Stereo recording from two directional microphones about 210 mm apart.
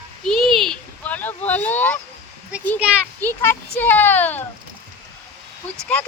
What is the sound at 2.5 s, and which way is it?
Speech, 5° right (ahead or behind).